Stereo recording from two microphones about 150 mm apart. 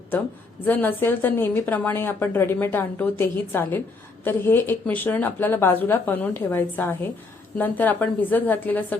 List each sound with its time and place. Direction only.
0.6 s a woman's voice: 10° left (ahead or behind)